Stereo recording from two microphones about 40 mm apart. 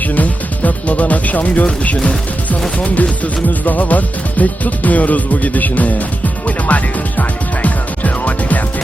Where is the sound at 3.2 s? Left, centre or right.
Left.